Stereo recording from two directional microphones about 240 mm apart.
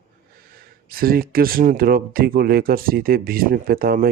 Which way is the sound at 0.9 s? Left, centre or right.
Right.